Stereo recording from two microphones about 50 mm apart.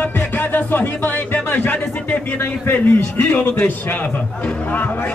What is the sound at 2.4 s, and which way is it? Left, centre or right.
A man's voice, left.